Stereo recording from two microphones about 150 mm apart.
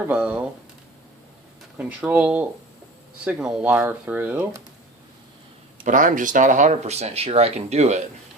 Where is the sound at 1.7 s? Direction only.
10° right (ahead or behind).